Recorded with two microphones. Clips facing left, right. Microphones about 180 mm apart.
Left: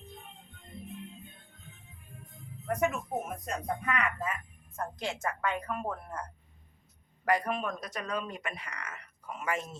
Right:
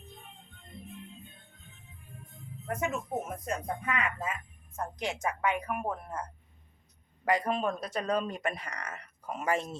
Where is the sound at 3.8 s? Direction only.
20° right (ahead or behind).